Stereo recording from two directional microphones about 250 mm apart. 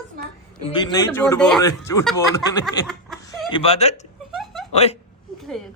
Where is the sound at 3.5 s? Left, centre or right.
Left.